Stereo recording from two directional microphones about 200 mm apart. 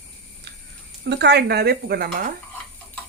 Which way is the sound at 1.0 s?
55° right (ahead or behind).